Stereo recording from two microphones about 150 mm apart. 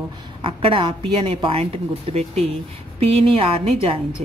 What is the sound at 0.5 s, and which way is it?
A woman's voice, 35° right (ahead or behind).